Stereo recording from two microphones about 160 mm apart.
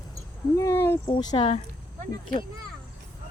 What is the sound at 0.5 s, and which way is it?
Speech, 15° left (ahead or behind).